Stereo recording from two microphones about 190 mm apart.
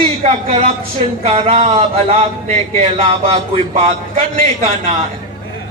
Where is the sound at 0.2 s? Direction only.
35° right (ahead or behind).